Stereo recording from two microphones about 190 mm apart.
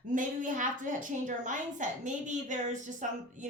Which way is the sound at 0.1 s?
45° right (ahead or behind).